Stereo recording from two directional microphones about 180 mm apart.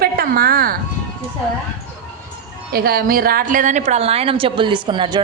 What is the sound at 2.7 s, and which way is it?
A woman's voice, 55° right (ahead or behind).